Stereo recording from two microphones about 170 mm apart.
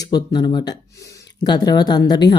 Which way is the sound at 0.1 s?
25° left (ahead or behind).